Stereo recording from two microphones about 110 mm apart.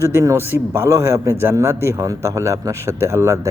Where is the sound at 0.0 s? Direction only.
25° right (ahead or behind).